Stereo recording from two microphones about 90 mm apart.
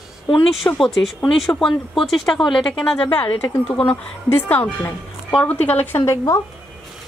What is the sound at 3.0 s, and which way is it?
Speech, 50° left (ahead or behind).